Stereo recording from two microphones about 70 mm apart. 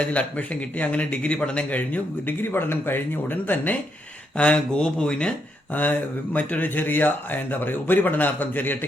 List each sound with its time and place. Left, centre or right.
0.0 s a man's voice: centre
4.4 s a man's voice: centre